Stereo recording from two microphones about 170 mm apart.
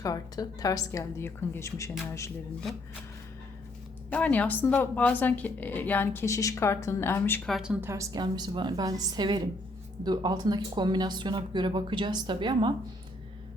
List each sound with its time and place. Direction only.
0.0 s a woman's voice: 20° left (ahead or behind)
4.1 s a woman's voice: 10° left (ahead or behind)
7.5 s speech: 5° right (ahead or behind); by 12.7 s 30° right (ahead or behind)